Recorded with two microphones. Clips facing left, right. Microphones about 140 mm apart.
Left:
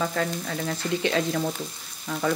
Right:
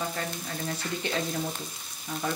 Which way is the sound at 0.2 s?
90° left.